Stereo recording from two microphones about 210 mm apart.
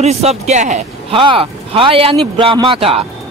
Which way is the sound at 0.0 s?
30° right (ahead or behind).